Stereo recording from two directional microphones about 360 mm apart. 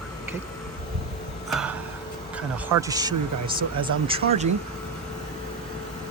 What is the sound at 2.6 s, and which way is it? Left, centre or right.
Speech, centre.